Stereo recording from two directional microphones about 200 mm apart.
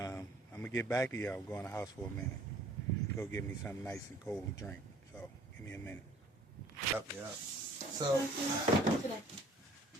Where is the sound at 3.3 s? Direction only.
10° left (ahead or behind).